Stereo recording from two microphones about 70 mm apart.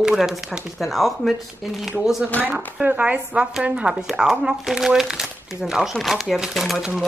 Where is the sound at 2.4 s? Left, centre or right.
Right.